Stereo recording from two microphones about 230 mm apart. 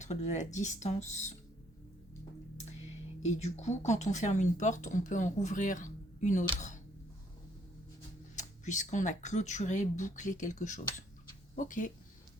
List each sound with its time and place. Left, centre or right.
0.0 s speech: left
3.2 s speech: left
8.4 s speech: left